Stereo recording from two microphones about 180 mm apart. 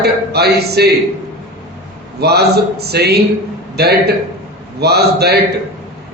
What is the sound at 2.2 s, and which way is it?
Speech, 65° right (ahead or behind).